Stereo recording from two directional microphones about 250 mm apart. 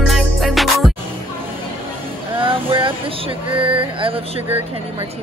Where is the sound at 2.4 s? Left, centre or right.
Right.